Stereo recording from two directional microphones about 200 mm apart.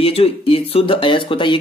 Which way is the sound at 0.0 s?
30° left (ahead or behind).